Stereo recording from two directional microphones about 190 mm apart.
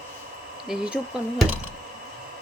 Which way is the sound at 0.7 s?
5° right (ahead or behind).